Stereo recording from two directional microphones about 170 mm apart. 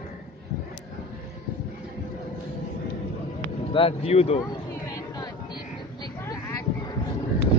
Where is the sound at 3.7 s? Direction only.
35° left (ahead or behind).